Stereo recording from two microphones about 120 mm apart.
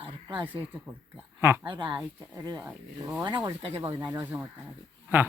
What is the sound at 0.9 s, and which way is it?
Speech, 20° right (ahead or behind).